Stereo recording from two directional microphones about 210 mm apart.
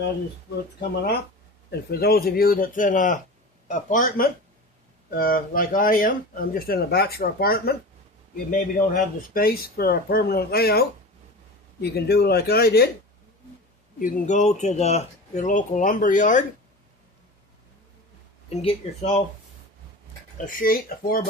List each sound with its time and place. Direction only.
1.9 s speech: 45° left (ahead or behind)
14.0 s speech: 40° left (ahead or behind)
18.4 s speech: 30° left (ahead or behind)
20.4 s speech: 40° left (ahead or behind)